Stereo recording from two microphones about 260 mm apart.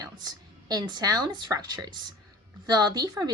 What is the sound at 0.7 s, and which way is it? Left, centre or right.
Speech, centre.